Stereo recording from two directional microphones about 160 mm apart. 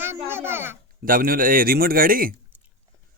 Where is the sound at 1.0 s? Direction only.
60° right (ahead or behind).